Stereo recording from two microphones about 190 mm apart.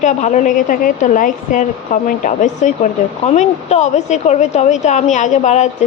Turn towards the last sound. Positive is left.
turn(degrees=40)  # may be behind; listen again after turning